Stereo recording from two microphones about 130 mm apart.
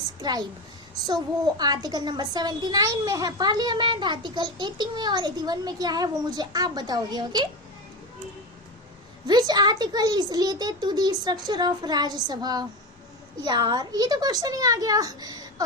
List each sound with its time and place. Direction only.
0.2 s a woman's voice: 30° right (ahead or behind)
9.2 s a child's voice: 30° right (ahead or behind)